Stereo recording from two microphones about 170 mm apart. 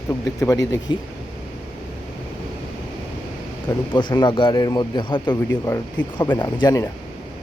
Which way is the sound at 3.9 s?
25° left (ahead or behind).